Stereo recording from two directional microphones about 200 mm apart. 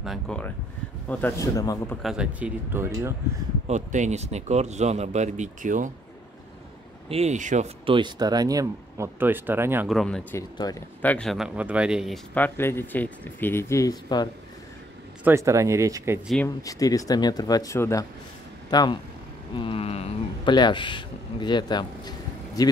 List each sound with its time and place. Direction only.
0.0 s speech: centre (ahead or behind); by 2.0 s 15° left (ahead or behind)
2.0 s speech: 5° right (ahead or behind)
3.6 s speech: 35° right (ahead or behind)
7.1 s speech: 35° right (ahead or behind); by 9.8 s 10° right (ahead or behind)
9.8 s speech: centre (ahead or behind)
10.6 s speech: 20° left (ahead or behind)
11.0 s speech: 5° left (ahead or behind)
12.4 s speech: 10° left (ahead or behind)
15.2 s speech: 15° right (ahead or behind)
16.6 s speech: 15° left (ahead or behind)